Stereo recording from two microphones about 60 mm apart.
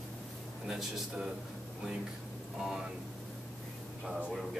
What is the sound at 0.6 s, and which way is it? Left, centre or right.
Speech, centre.